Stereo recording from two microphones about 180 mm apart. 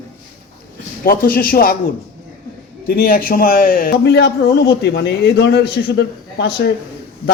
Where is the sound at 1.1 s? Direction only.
55° left (ahead or behind).